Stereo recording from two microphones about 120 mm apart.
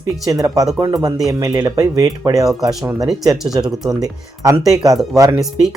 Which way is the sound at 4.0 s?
30° right (ahead or behind).